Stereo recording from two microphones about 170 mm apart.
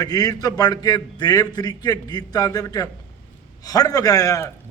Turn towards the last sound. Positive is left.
turn(degrees=20)  # may be behind; listen again after turning